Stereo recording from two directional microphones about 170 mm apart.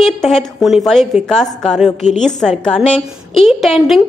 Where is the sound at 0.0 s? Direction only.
Centre (ahead or behind).